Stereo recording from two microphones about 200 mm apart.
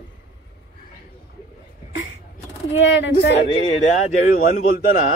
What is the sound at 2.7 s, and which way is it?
Speech, 65° left (ahead or behind).